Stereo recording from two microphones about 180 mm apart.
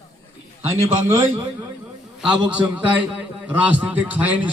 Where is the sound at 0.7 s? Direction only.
15° right (ahead or behind).